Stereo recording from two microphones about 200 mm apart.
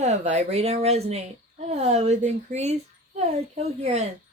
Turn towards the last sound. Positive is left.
turn(degrees=-30)  # may be behind; listen again after turning